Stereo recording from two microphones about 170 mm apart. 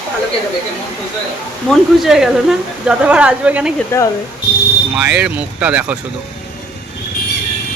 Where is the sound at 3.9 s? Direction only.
15° left (ahead or behind).